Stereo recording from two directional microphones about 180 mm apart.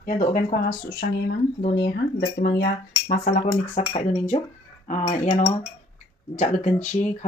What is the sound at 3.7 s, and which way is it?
Speech, 35° left (ahead or behind).